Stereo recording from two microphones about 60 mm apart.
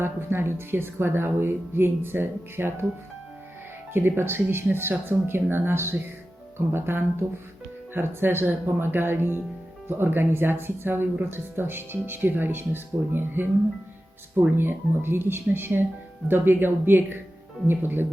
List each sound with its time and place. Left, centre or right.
0.0 s speech: right
3.9 s speech: right
14.5 s speech: right